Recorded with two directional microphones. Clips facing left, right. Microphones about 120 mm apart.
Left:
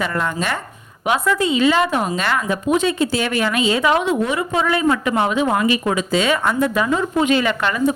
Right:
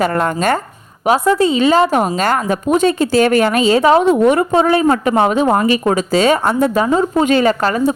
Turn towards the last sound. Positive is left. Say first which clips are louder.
# right 4 dB
turn(degrees=-40)  # may be behind; listen again after turning